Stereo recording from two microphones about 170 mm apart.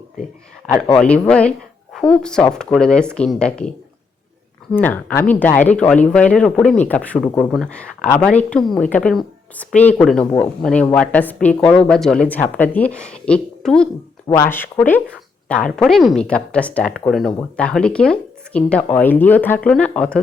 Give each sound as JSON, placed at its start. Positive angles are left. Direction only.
{"t": 0.9, "sound": "speech", "side_deg": 5}
{"t": 4.7, "sound": "a woman's voice", "side_deg": 10}
{"t": 7.3, "sound": "speech", "side_deg": 20}
{"t": 7.5, "sound": "a woman's voice", "side_deg": 5}
{"t": 14.3, "sound": "a woman's voice", "side_deg": 15}